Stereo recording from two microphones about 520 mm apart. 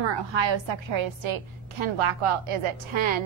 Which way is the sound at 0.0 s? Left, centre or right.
Right.